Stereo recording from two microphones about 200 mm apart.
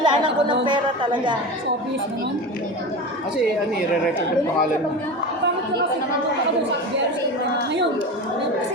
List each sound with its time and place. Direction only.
0.0 s a woman's voice: 25° right (ahead or behind)